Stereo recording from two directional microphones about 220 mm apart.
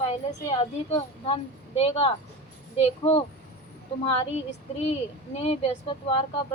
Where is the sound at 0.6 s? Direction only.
25° left (ahead or behind).